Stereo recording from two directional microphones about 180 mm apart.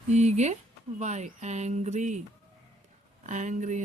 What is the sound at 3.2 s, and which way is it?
Speech, 45° right (ahead or behind).